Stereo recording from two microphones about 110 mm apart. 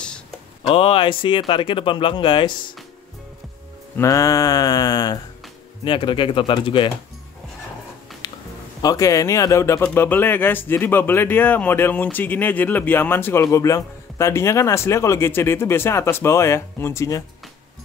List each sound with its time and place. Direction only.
0.7 s speech: 55° left (ahead or behind)
3.9 s a sound: 30° left (ahead or behind)
5.9 s speech: 50° left (ahead or behind)
8.2 s music: 35° left (ahead or behind)
8.8 s speech: 30° left (ahead or behind)
13.4 s speech: 30° left (ahead or behind)